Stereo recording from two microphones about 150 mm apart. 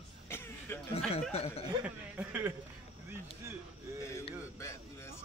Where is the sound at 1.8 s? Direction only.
10° right (ahead or behind).